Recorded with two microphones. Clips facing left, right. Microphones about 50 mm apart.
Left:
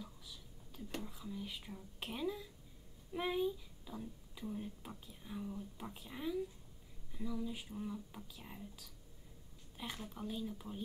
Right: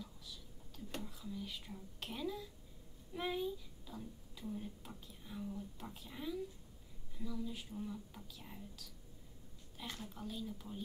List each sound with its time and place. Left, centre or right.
0.0 s whispering: centre
3.1 s speech: centre